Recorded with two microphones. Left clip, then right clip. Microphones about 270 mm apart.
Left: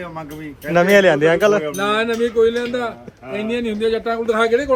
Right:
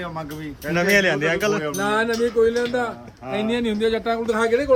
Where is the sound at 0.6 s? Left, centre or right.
Centre.